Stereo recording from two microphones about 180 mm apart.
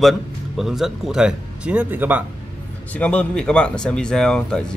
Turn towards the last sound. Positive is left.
turn(degrees=5)  # may be behind; listen again after turning